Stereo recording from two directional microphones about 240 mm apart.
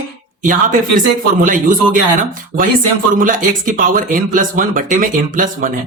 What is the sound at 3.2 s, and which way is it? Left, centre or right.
Speech, right.